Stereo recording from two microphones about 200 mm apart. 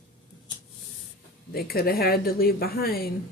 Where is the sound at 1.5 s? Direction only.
50° left (ahead or behind).